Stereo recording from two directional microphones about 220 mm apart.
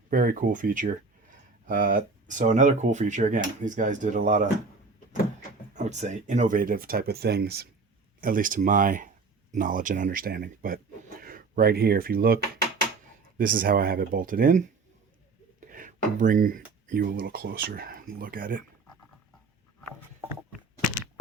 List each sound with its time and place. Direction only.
0.1 s speech: 40° right (ahead or behind)
5.7 s speech: 30° right (ahead or behind)
13.4 s speech: 40° right (ahead or behind)
15.7 s speech: 40° right (ahead or behind)